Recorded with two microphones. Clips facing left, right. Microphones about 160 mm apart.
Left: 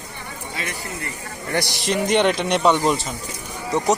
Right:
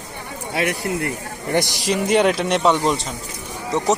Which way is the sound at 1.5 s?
20° right (ahead or behind).